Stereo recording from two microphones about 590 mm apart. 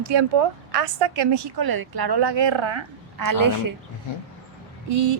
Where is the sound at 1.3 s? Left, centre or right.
Right.